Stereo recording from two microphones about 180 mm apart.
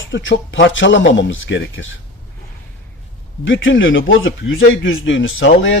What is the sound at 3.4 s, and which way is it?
Speech, 90° left.